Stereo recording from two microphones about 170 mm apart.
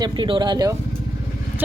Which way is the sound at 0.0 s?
30° right (ahead or behind).